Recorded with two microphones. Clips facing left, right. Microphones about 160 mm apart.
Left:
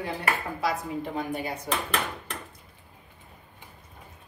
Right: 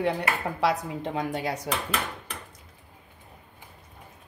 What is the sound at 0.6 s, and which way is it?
A woman's voice, 80° right.